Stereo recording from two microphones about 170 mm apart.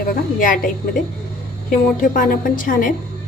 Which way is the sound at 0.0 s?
55° left (ahead or behind).